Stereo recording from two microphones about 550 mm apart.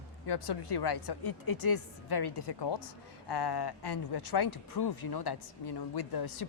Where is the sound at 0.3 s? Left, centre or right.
Left.